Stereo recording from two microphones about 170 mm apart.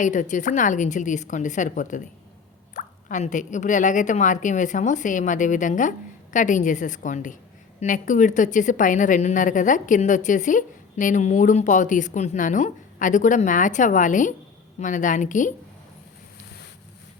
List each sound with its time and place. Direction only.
0.0 s a woman's voice: 45° left (ahead or behind)